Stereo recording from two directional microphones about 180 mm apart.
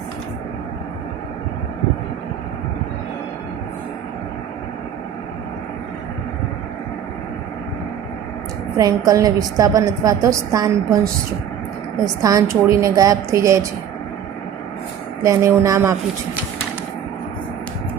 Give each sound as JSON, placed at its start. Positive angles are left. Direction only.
{"t": 8.8, "sound": "a woman's voice", "side_deg": -20}
{"t": 15.2, "sound": "a woman's voice", "side_deg": -15}